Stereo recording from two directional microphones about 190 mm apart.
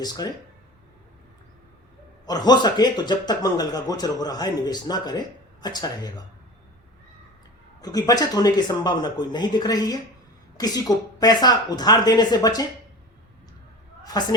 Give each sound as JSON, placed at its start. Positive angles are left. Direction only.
{"t": 0.0, "sound": "speech", "side_deg": 20}
{"t": 2.2, "sound": "speech", "side_deg": 20}
{"t": 7.8, "sound": "speech", "side_deg": 20}
{"t": 14.1, "sound": "speech", "side_deg": 20}